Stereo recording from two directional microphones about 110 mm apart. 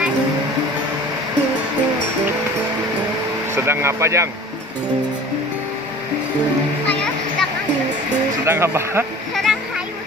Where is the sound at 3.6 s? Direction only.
25° right (ahead or behind).